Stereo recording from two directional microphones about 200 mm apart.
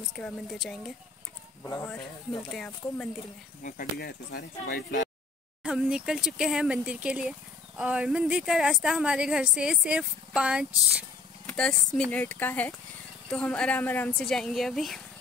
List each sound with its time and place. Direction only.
0.1 s speech: centre (ahead or behind)
1.6 s speech: 15° left (ahead or behind)
2.5 s speech: 5° left (ahead or behind)
3.6 s speech: 50° left (ahead or behind)
5.6 s speech: 5° right (ahead or behind)